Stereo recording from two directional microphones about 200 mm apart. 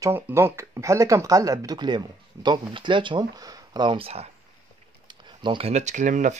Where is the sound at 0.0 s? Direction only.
10° right (ahead or behind).